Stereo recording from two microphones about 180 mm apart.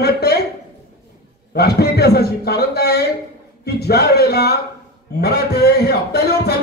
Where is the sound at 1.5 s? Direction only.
60° left (ahead or behind).